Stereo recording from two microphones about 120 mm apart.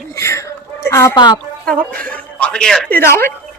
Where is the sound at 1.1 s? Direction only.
35° left (ahead or behind).